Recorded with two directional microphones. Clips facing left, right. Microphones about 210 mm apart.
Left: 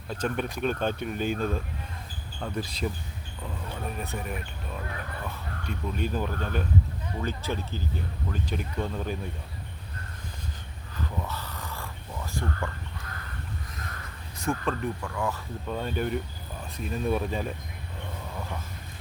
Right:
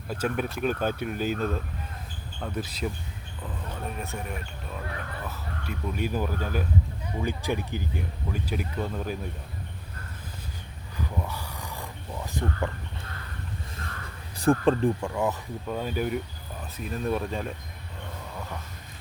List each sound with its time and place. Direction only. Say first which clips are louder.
0.1 s speech: right 1 dB; 5° right (ahead or behind)
3.9 s speech: left 1 dB; centre (ahead or behind)
10.9 s a sound: right 1 dB; 10° right (ahead or behind)
14.3 s speech: right 8 dB; 35° right (ahead or behind)
15.6 s speech: right 1 dB; 5° right (ahead or behind)